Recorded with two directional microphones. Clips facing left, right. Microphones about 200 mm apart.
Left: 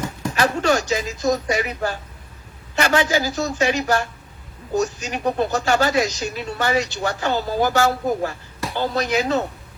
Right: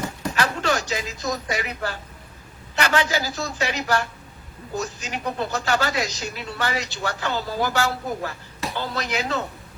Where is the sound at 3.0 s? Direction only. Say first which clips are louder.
Left 5 dB; 15° left (ahead or behind).